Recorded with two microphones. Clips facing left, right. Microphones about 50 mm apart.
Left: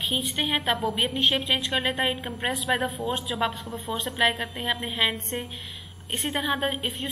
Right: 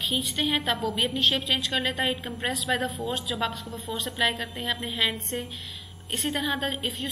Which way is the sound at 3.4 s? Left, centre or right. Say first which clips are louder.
Left 2 dB; centre.